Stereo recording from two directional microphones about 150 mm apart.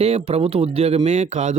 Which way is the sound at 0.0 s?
45° right (ahead or behind).